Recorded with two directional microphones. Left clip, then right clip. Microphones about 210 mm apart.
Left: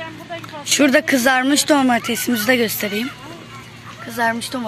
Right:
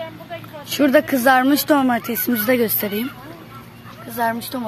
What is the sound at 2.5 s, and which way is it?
Speech, 10° right (ahead or behind).